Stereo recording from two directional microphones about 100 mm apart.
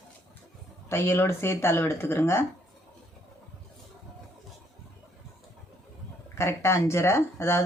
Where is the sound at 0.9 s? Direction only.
25° left (ahead or behind).